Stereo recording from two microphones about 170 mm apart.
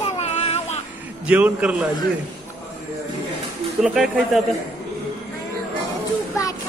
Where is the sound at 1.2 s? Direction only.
10° right (ahead or behind).